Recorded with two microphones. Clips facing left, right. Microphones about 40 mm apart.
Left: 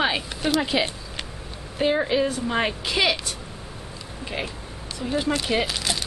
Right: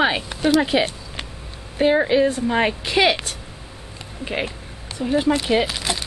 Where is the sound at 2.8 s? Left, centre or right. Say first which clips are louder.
Right 5 dB; right.